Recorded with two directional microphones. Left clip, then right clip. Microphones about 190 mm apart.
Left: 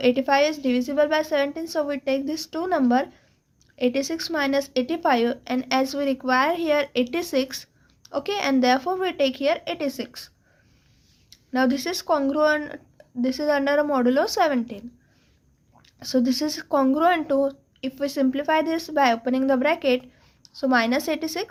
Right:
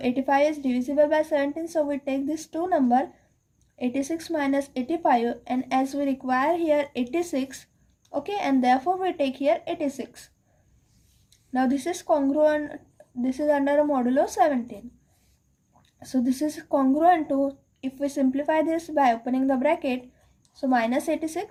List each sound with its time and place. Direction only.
0.0 s a woman's voice: 40° left (ahead or behind)
11.5 s a woman's voice: 35° left (ahead or behind)
15.8 s a woman's voice: 40° left (ahead or behind)